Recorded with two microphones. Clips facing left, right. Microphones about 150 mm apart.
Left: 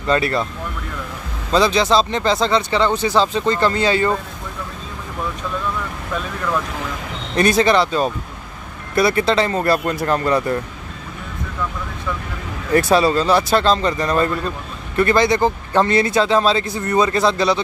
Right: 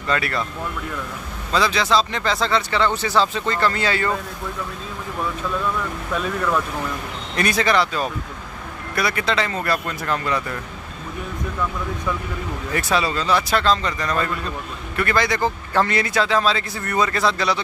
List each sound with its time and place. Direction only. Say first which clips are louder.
0.1 s speech: left 5 dB; 30° left (ahead or behind)
1.5 s speech: left 4 dB; 25° left (ahead or behind)
7.3 s speech: left 5 dB; 25° left (ahead or behind)
12.7 s speech: left 8 dB; 35° left (ahead or behind)